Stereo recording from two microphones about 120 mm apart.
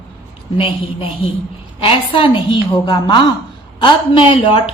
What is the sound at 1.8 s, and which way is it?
A man's voice, 50° left (ahead or behind).